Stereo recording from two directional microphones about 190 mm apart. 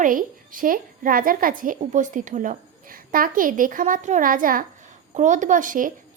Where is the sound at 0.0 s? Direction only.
45° right (ahead or behind).